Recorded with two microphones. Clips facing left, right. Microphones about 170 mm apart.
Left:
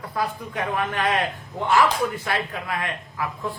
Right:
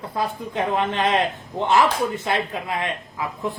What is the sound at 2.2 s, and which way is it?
Speech, 20° right (ahead or behind).